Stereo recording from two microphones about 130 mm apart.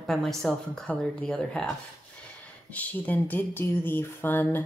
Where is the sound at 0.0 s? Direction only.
Centre (ahead or behind).